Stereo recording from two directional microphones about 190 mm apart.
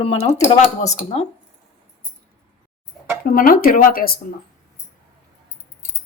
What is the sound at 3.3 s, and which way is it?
Speech, 50° left (ahead or behind).